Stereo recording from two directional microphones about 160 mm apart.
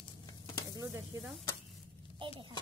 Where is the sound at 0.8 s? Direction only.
20° right (ahead or behind).